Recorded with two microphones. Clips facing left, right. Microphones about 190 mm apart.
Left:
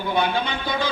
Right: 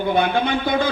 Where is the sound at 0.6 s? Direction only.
55° right (ahead or behind).